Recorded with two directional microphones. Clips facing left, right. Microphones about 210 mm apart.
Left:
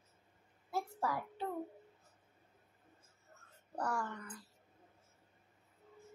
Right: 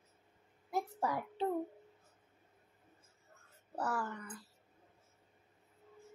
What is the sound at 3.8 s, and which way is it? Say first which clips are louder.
Speech: right 1 dB; 5° right (ahead or behind).